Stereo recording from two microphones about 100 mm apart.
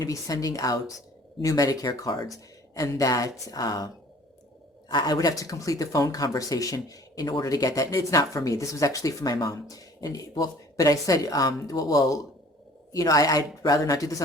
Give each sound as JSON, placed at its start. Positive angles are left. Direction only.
{"t": 0.0, "sound": "speech", "side_deg": 35}
{"t": 4.9, "sound": "speech", "side_deg": 40}